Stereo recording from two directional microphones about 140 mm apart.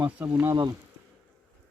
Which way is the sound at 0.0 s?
20° right (ahead or behind).